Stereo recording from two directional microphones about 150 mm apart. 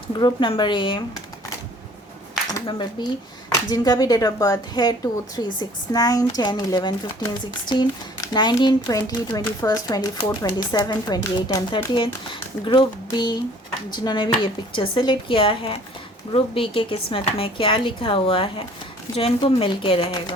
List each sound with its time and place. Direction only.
0.2 s speech: 30° left (ahead or behind)
2.6 s speech: 30° left (ahead or behind)